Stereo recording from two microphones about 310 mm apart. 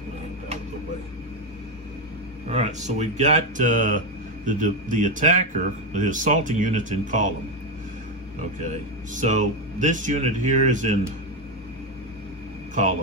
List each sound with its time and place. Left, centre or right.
2.4 s speech: right
9.1 s speech: right